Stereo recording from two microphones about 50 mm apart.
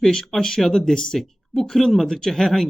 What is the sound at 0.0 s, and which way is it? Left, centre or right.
Speech, centre.